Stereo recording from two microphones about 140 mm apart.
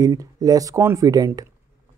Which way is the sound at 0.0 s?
25° right (ahead or behind).